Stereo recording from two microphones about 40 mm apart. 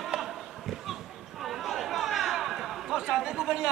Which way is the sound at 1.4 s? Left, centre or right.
Centre.